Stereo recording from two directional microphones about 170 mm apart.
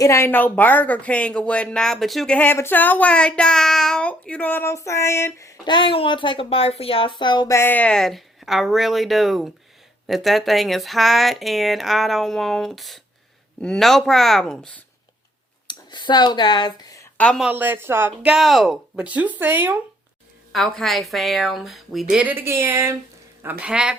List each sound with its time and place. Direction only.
0.0 s speech: 15° left (ahead or behind)
15.6 s a sound: 25° left (ahead or behind)
17.2 s speech: 5° left (ahead or behind)
17.5 s speech: 10° right (ahead or behind)
20.5 s speech: centre (ahead or behind)